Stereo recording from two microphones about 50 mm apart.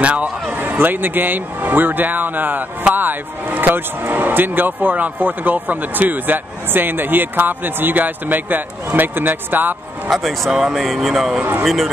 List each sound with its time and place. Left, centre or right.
0.0 s a man's voice: right
0.6 s speech: right
10.1 s speech: centre
10.5 s speech: centre